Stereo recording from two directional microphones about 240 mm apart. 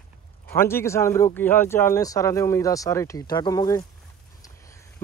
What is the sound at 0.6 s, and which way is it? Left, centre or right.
Speech, centre.